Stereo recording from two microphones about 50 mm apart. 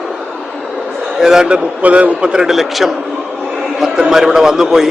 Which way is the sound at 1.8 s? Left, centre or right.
Right.